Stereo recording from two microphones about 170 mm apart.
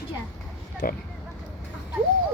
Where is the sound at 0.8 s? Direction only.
55° left (ahead or behind).